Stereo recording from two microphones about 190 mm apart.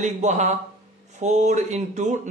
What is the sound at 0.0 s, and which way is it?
A man's voice, 35° right (ahead or behind).